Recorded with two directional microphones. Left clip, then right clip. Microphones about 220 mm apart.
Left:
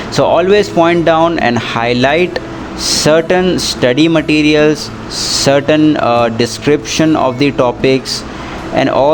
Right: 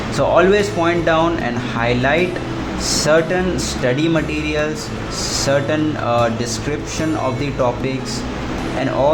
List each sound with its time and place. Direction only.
0.2 s speech: 40° left (ahead or behind)